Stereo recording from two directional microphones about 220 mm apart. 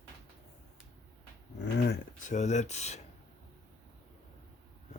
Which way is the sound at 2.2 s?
35° left (ahead or behind).